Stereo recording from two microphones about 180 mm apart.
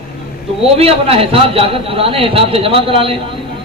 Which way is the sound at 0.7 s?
35° right (ahead or behind).